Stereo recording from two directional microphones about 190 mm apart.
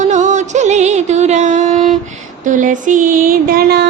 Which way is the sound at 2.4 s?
45° right (ahead or behind).